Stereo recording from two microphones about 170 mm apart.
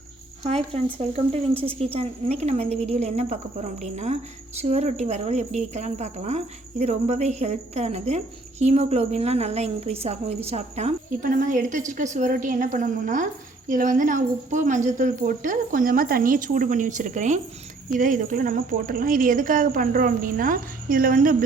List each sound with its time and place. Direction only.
0.4 s a woman's voice: 35° right (ahead or behind); by 21.3 s 55° right (ahead or behind)